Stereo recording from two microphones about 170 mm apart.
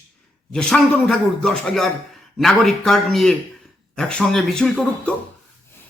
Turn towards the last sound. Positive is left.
turn(degrees=5)  # may be behind; listen again after turning